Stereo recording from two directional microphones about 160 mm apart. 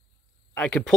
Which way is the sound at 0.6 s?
5° left (ahead or behind).